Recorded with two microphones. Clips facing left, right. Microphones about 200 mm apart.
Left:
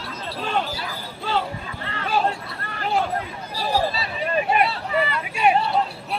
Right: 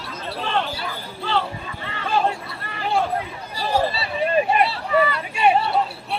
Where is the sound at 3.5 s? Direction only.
Centre (ahead or behind).